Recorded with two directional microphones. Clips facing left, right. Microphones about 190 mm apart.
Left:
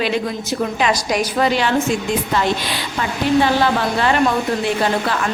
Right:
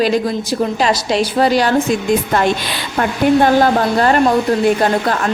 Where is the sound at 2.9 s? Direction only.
50° right (ahead or behind).